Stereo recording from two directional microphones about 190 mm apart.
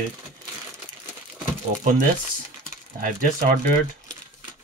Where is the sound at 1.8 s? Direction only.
45° right (ahead or behind).